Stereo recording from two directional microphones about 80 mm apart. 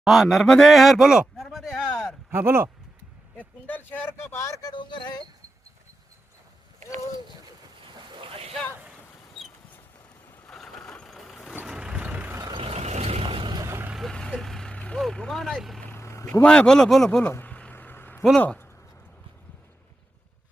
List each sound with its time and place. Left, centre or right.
0.0 s speech: centre
1.5 s a sound: centre
2.3 s speech: right
3.3 s speech: left
4.7 s speech: left
10.4 s vehicle: centre
13.2 s vehicle: right
13.6 s vehicle: right
14.1 s vehicle: centre
14.9 s speech: centre
16.0 s a sound: left
16.4 s speech: centre
17.2 s a sound: left
18.3 s speech: centre